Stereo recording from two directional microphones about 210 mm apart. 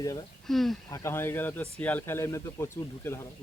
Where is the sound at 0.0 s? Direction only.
15° left (ahead or behind).